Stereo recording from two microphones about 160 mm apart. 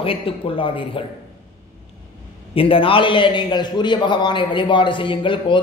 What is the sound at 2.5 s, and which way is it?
A man's voice, 35° left (ahead or behind).